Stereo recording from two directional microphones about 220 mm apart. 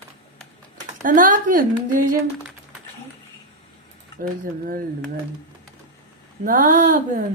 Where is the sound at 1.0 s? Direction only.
35° right (ahead or behind).